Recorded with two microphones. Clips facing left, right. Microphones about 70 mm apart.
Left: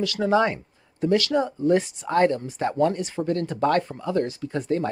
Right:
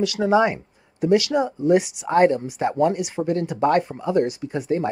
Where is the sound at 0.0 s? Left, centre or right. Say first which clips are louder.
Right 3 dB; centre.